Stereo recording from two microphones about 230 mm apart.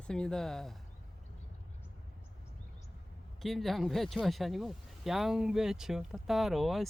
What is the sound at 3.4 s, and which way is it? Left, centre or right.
Speech, centre.